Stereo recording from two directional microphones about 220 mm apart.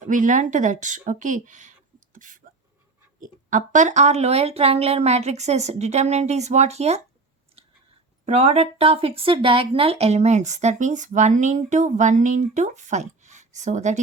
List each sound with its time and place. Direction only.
0.0 s speech: 35° right (ahead or behind)
2.1 s a sound: 35° right (ahead or behind)
3.2 s speech: 35° right (ahead or behind)
8.2 s speech: 30° right (ahead or behind)